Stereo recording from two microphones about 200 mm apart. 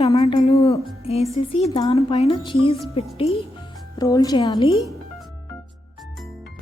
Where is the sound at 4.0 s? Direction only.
20° left (ahead or behind).